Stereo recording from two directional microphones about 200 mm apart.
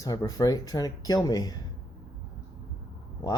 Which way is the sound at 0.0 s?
15° left (ahead or behind).